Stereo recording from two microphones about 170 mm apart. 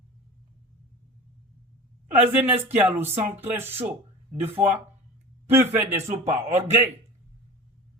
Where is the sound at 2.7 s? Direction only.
10° right (ahead or behind).